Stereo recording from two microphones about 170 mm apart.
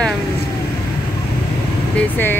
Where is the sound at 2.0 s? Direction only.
10° left (ahead or behind).